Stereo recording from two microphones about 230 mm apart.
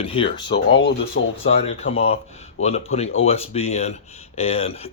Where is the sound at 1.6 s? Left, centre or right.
Left.